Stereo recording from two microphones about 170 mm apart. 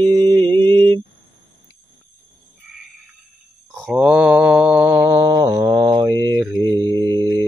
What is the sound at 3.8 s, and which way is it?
Mantra, 5° right (ahead or behind).